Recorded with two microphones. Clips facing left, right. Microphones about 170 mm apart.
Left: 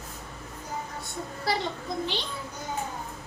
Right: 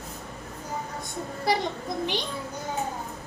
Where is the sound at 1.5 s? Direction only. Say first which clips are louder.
Right 3 dB; 15° right (ahead or behind).